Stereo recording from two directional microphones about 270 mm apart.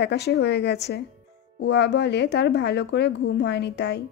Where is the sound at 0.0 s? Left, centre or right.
Left.